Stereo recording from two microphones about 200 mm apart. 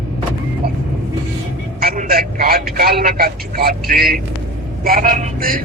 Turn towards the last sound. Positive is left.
turn(degrees=-45)  # may be behind; listen again after turning